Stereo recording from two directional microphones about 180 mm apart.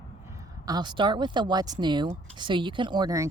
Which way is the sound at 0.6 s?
25° right (ahead or behind).